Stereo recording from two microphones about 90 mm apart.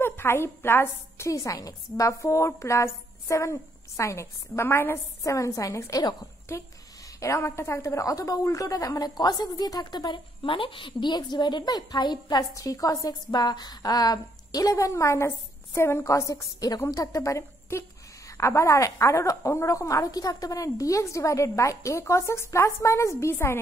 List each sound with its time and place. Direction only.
0.0 s a woman's voice: 25° left (ahead or behind); by 12.4 s 50° left (ahead or behind)
12.5 s a woman's voice: 40° left (ahead or behind)